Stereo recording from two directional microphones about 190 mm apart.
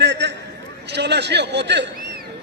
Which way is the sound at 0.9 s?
65° right (ahead or behind).